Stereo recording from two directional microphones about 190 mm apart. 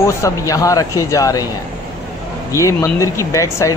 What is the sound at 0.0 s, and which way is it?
Speech, 15° left (ahead or behind).